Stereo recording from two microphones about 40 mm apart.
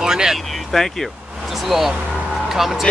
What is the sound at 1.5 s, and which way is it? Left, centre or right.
Speech, centre.